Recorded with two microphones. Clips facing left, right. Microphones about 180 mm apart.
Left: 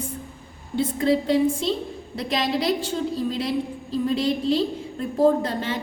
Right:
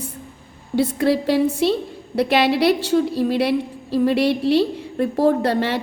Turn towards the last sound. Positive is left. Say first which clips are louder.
# right 3 dB
turn(degrees=-70)  # may be behind; listen again after turning